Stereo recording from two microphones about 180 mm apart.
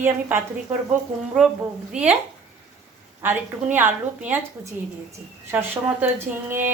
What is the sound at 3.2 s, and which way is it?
A woman's voice, 10° right (ahead or behind).